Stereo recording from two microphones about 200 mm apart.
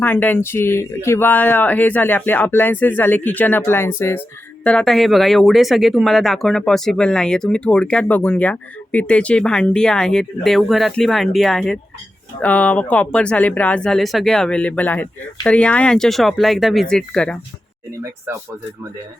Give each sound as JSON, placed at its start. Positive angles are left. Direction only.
{"t": 0.0, "sound": "speech", "side_deg": 10}